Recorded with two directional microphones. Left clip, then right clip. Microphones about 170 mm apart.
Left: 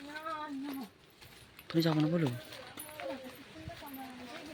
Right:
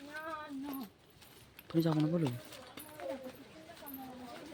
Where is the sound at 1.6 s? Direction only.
5° right (ahead or behind).